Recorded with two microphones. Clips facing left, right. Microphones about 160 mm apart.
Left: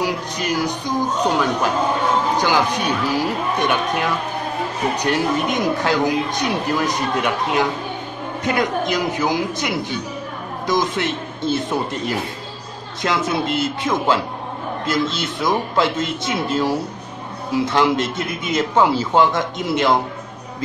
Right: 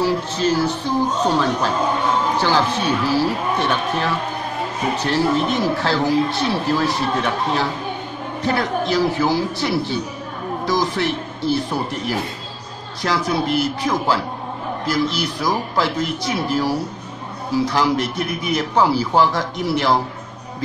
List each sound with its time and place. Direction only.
0.0 s speech: 15° left (ahead or behind)